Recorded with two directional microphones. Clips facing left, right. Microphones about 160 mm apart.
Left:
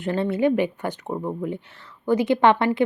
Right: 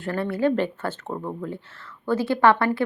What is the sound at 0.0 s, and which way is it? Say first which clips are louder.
Speech: left 2 dB; 20° left (ahead or behind).